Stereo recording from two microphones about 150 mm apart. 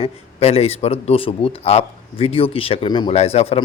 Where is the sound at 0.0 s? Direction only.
40° left (ahead or behind).